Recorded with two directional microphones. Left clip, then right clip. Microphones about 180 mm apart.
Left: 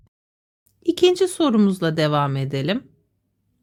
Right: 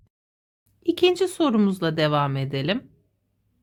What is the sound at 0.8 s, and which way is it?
A woman's voice, 25° left (ahead or behind).